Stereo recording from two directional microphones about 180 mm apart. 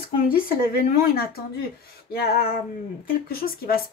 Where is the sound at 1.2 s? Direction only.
60° left (ahead or behind).